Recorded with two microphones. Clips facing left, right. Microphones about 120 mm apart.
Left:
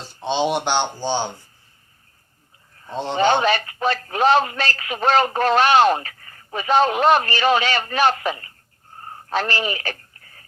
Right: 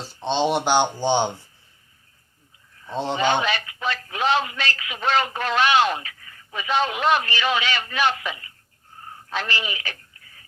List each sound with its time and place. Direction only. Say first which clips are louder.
0.2 s speech: left 1 dB; 5° left (ahead or behind)
0.9 s speech: right 3 dB; 20° right (ahead or behind)
2.9 s speech: even; centre (ahead or behind)
3.2 s speech: left 6 dB; 40° left (ahead or behind)
9.0 s a sound: left 6 dB; 45° left (ahead or behind)